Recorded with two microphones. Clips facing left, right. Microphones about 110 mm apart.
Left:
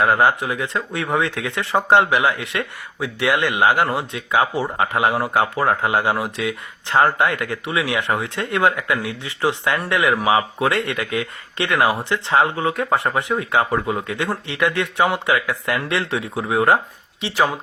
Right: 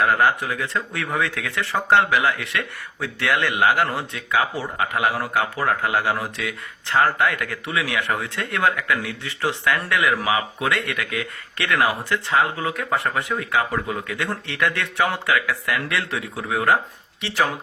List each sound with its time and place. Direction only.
0.0 s speech: 20° left (ahead or behind)